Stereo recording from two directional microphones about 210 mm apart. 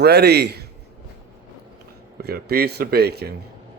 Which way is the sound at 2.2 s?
45° right (ahead or behind).